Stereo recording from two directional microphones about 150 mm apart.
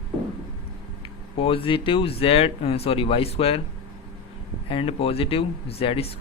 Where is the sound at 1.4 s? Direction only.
35° left (ahead or behind).